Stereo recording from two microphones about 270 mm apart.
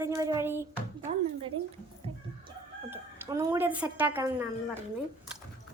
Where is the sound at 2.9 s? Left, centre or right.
Centre.